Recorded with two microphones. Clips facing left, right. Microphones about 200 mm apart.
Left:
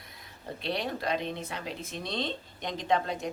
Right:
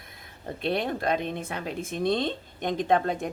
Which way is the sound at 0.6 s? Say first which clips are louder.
Right 5 dB; 50° right (ahead or behind).